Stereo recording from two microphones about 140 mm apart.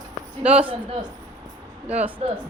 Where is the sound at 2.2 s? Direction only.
50° right (ahead or behind).